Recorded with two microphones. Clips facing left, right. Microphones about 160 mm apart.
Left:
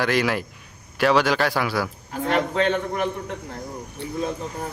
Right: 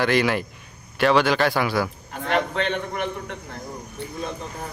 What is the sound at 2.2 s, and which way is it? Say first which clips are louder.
Speech: left 2 dB; 35° left (ahead or behind).